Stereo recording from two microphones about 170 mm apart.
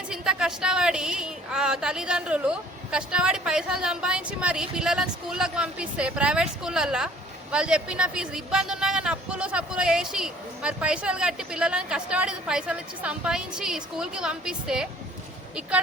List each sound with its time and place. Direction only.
0.1 s speech: 5° right (ahead or behind)